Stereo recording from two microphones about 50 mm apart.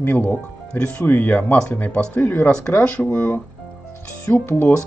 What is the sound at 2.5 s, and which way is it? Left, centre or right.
Speech, centre.